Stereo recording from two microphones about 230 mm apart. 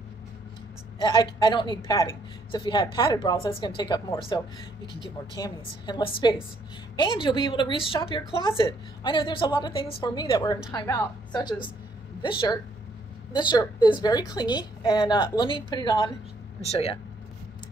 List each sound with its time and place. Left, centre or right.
0.9 s a woman's voice: centre
5.4 s a woman's voice: centre